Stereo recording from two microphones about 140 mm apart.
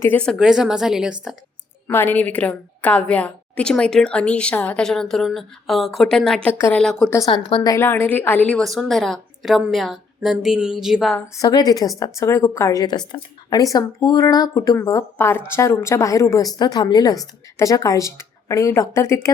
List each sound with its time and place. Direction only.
0.0 s a woman's voice: 10° left (ahead or behind)
0.3 s a woman's voice: 5° right (ahead or behind)
1.9 s a woman's voice: 15° left (ahead or behind)
7.3 s a woman's voice: 35° left (ahead or behind)
7.7 s a woman's voice: 15° left (ahead or behind); by 11.2 s centre (ahead or behind)
11.3 s speech: 30° left (ahead or behind)